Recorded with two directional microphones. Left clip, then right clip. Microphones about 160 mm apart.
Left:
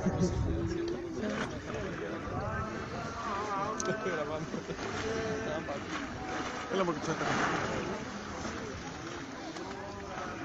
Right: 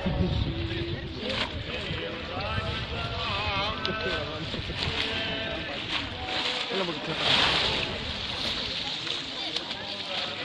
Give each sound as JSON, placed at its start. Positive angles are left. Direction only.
{"t": 7.2, "sound": "speech", "side_deg": -40}